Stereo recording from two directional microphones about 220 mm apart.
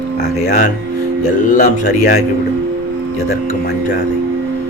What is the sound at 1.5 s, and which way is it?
Speech, 35° left (ahead or behind).